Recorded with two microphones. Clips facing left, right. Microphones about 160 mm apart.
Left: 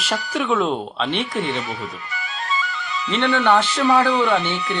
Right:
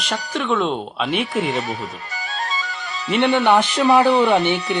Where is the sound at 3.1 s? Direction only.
20° right (ahead or behind).